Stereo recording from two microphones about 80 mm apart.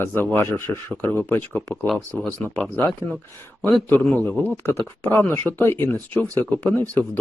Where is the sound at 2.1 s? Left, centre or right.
Centre.